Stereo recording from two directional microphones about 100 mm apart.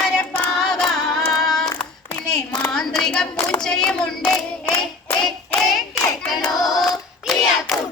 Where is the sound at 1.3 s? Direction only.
5° left (ahead or behind).